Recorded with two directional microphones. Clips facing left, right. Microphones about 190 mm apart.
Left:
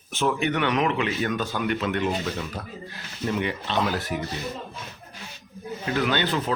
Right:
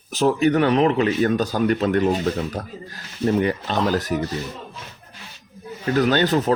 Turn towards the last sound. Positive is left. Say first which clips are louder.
# right 6 dB
turn(degrees=-45)  # may be behind; listen again after turning